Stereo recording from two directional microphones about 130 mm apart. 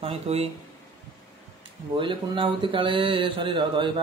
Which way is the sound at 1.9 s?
40° right (ahead or behind).